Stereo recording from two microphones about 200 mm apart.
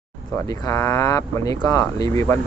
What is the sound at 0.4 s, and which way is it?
Speech, 20° left (ahead or behind).